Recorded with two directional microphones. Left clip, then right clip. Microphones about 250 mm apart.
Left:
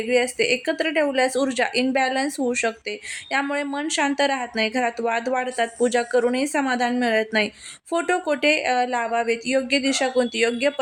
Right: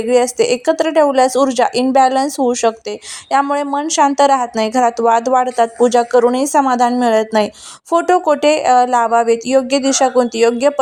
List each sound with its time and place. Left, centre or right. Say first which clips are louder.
0.1 s a woman's voice: right 7 dB; centre